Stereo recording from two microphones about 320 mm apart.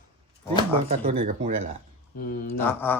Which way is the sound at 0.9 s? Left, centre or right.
Right.